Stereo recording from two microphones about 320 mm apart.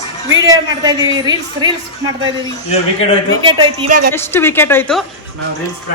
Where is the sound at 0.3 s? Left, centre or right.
Centre.